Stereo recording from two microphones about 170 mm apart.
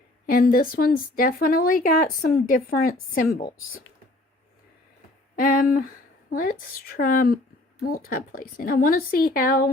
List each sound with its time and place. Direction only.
0.3 s speech: 55° left (ahead or behind)
5.4 s speech: 55° left (ahead or behind)